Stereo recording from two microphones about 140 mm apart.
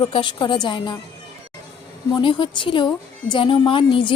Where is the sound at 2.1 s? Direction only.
35° left (ahead or behind).